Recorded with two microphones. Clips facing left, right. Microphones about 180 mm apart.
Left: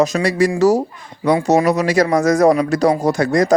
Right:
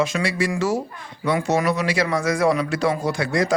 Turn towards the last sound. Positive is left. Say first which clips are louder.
# left 6 dB
turn(degrees=45)  # may be behind; listen again after turning